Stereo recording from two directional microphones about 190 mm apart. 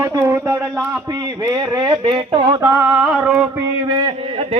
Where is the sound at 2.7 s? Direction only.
5° right (ahead or behind).